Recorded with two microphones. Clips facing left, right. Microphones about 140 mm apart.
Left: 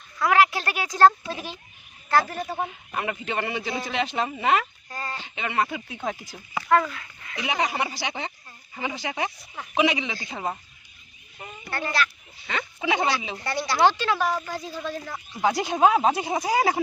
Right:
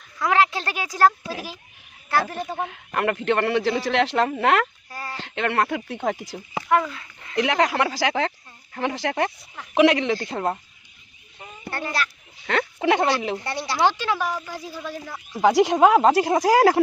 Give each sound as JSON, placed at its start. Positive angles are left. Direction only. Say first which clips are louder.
{"t": 0.2, "sound": "speech", "louder": "even", "side_deg": -25}
{"t": 0.8, "sound": "speech", "louder": "left 2 dB", "side_deg": -10}
{"t": 2.6, "sound": "a man's voice", "louder": "right 6 dB", "side_deg": -70}
{"t": 4.9, "sound": "a sound", "louder": "left 1 dB", "side_deg": -5}
{"t": 5.1, "sound": "a man's voice", "louder": "right 4 dB", "side_deg": -80}
{"t": 6.3, "sound": "speech", "louder": "left 2 dB", "side_deg": -20}
{"t": 7.3, "sound": "speech", "louder": "right 6 dB", "side_deg": -85}
{"t": 8.7, "sound": "a man's voice", "louder": "right 6 dB", "side_deg": -70}
{"t": 11.7, "sound": "speech", "louder": "even", "side_deg": -10}
{"t": 12.5, "sound": "speech", "louder": "right 6 dB", "side_deg": -70}
{"t": 13.5, "sound": "speech", "louder": "left 1 dB", "side_deg": -30}
{"t": 13.8, "sound": "speech", "louder": "left 1 dB", "side_deg": -15}
{"t": 15.3, "sound": "speech", "louder": "right 7 dB", "side_deg": -70}